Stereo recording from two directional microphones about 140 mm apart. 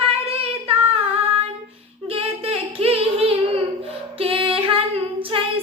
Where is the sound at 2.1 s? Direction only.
45° right (ahead or behind).